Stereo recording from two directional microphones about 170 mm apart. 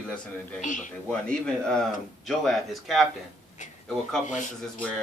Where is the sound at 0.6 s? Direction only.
45° left (ahead or behind).